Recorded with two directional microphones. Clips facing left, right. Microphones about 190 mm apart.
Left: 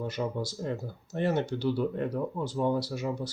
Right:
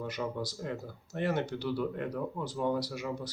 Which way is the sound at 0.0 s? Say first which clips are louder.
Left 3 dB; 25° left (ahead or behind).